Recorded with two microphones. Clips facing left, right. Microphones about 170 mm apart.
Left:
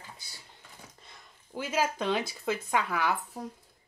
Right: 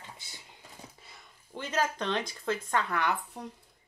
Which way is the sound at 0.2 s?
20° right (ahead or behind).